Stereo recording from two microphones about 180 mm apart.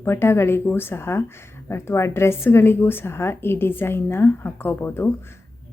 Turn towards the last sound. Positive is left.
turn(degrees=10)  # may be behind; listen again after turning